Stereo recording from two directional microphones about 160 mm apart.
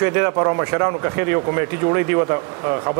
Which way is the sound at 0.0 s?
15° right (ahead or behind).